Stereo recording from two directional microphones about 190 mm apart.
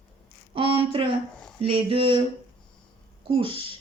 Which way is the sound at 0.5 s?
30° right (ahead or behind).